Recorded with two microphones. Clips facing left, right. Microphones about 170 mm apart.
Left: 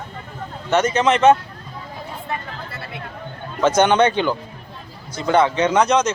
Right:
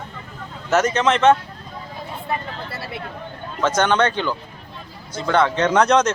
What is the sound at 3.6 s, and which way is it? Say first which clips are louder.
A man's voice: left 3 dB; 15° left (ahead or behind).